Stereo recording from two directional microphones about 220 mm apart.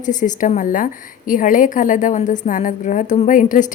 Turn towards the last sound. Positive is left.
turn(degrees=35)  # may be behind; listen again after turning